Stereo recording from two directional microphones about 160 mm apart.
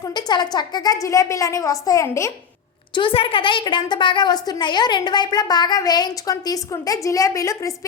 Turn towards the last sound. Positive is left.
turn(degrees=20)  # may be behind; listen again after turning